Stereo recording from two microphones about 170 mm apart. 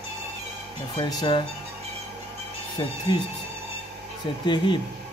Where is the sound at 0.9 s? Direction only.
25° left (ahead or behind).